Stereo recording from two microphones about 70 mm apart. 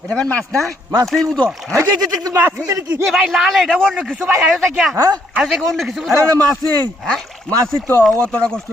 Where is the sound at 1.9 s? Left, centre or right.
Right.